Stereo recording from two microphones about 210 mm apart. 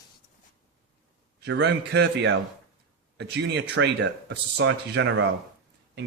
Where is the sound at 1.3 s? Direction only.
55° right (ahead or behind).